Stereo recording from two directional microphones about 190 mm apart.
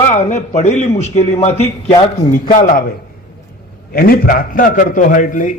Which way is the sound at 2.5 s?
45° left (ahead or behind).